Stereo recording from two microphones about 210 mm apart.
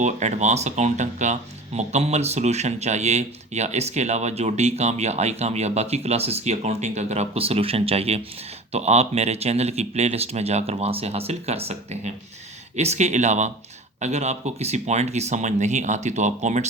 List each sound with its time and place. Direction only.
0.0 s speech: 35° right (ahead or behind)